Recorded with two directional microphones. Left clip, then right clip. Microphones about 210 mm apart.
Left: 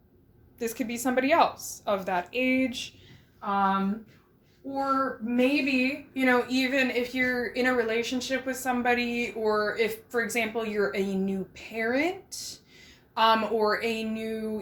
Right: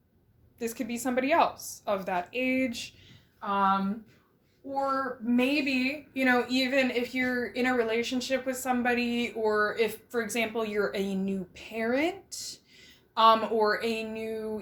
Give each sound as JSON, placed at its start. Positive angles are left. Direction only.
{"t": 0.6, "sound": "a woman's voice", "side_deg": 0}
{"t": 3.4, "sound": "speech", "side_deg": -30}
{"t": 5.4, "sound": "a woman's voice", "side_deg": -35}